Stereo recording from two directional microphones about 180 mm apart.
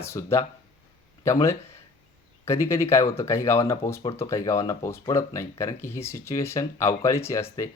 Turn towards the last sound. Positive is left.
turn(degrees=15)  # may be behind; listen again after turning